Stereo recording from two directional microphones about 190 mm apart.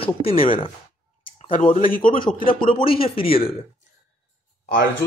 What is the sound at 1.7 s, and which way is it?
Speech, 45° left (ahead or behind).